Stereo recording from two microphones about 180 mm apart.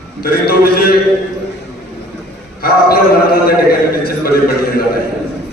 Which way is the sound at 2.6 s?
55° left (ahead or behind).